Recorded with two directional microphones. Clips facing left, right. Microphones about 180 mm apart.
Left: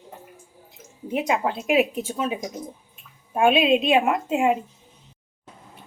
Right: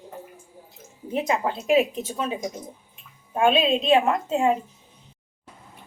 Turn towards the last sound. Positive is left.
turn(degrees=10)  # may be behind; listen again after turning